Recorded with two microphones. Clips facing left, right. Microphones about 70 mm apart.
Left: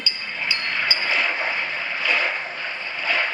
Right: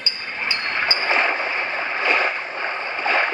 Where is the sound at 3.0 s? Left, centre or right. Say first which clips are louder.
Right 3 dB; right.